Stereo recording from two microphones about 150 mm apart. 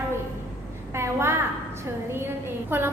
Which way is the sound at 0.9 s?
15° right (ahead or behind).